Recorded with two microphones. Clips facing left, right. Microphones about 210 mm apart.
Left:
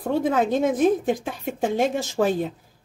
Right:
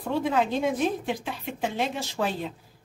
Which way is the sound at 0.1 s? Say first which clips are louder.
Left 4 dB; 45° left (ahead or behind).